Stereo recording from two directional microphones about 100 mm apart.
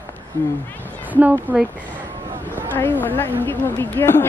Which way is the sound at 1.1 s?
15° right (ahead or behind).